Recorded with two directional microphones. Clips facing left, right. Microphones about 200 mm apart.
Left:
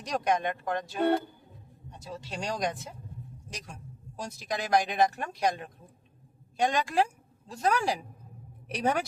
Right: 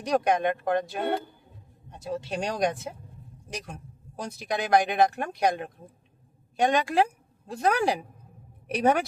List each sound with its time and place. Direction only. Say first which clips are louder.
0.0 s speech: right 5 dB; 60° right (ahead or behind)
4.2 s speech: right 4 dB; 60° right (ahead or behind)